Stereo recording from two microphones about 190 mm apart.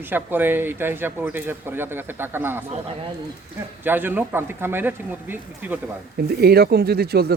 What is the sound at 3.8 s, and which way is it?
Speech, 10° right (ahead or behind).